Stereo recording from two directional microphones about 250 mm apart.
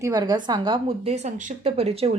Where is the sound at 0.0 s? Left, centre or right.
Centre.